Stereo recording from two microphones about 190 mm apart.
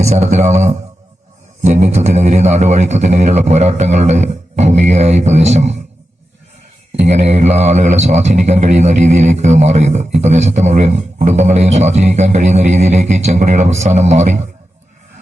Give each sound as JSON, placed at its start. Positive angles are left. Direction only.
{"t": 0.0, "sound": "a man's voice", "side_deg": -35}
{"t": 7.1, "sound": "a man's voice", "side_deg": -35}